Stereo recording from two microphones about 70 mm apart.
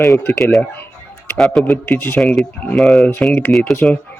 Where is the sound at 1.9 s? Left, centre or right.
Left.